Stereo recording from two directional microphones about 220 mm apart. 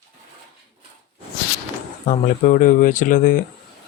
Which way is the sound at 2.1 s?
35° left (ahead or behind).